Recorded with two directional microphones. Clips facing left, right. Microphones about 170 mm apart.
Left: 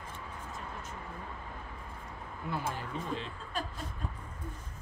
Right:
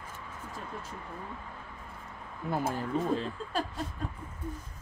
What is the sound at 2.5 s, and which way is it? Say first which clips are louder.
Speech: right 7 dB; 40° right (ahead or behind).